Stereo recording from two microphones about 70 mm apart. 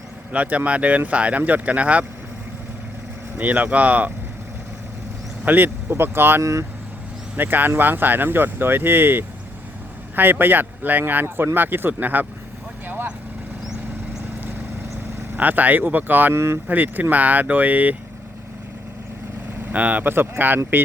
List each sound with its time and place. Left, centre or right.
0.3 s speech: centre
3.3 s speech: right
5.5 s speech: right
6.4 s speech: right
7.3 s speech: right
12.9 s vehicle: right
15.4 s speech: right
16.3 s speech: right
16.6 s speech: right
19.7 s speech: right